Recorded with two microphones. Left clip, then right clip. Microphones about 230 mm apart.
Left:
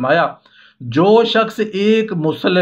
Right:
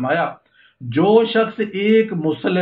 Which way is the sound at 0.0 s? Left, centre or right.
Left.